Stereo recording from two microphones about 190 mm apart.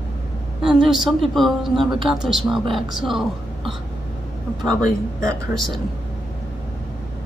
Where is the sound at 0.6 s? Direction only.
Centre (ahead or behind).